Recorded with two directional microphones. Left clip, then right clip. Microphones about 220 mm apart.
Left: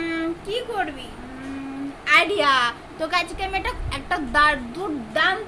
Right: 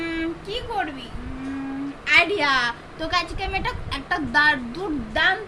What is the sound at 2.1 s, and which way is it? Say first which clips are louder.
A woman's voice: left 1 dB; 15° left (ahead or behind).